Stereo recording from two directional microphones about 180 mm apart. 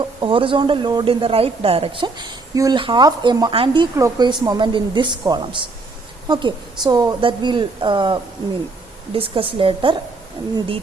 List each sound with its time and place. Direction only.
0.0 s speech: 30° right (ahead or behind)